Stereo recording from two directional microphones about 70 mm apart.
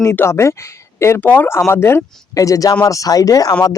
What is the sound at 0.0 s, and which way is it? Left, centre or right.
Speech, left.